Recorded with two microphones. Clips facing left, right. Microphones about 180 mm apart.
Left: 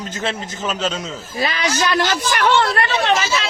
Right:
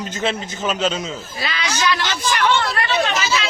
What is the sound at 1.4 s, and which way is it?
Speech, 35° left (ahead or behind).